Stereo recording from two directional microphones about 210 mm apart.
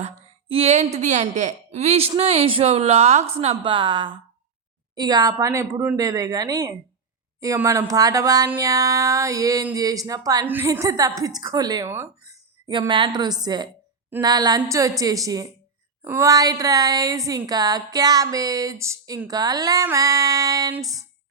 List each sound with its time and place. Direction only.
0.0 s a woman's voice: 25° right (ahead or behind)